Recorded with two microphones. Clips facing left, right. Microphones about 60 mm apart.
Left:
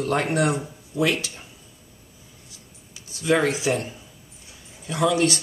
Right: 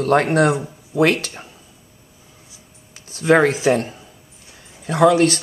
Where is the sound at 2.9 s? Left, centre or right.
Right.